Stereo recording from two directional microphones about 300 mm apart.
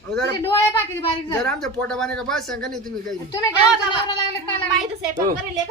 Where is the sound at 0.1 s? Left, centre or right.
Right.